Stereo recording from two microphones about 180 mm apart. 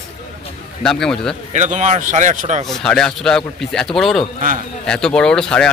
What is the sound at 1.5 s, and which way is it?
Speech, 40° right (ahead or behind).